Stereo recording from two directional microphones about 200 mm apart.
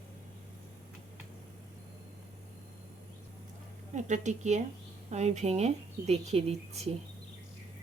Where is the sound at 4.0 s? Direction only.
35° right (ahead or behind).